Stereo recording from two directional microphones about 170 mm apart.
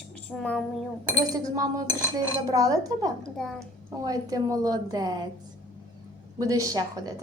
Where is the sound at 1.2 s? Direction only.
20° right (ahead or behind).